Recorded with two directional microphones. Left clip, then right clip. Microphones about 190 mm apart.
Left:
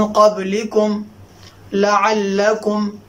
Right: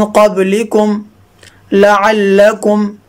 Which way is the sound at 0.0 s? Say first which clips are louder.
Right 4 dB; 50° right (ahead or behind).